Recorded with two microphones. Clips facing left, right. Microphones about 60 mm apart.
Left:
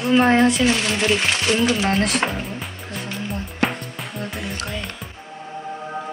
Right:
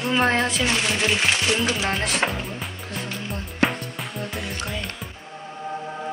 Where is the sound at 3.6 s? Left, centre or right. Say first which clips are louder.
Right 1 dB; centre.